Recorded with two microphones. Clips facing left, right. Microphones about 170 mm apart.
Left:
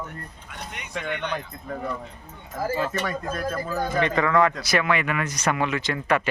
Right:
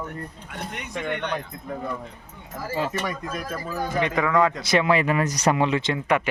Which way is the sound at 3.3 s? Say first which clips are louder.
Left 2 dB; 15° right (ahead or behind).